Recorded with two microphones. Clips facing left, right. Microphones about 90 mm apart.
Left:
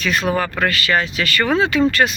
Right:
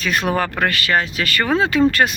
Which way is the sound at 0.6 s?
40° right (ahead or behind).